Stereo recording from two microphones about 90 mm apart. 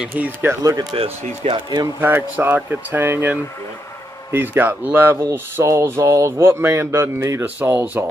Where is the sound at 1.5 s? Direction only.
50° right (ahead or behind).